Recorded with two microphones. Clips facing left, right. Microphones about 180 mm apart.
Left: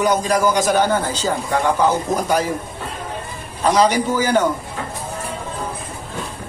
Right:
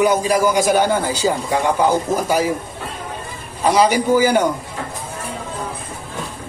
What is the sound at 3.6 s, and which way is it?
Speech, 10° right (ahead or behind).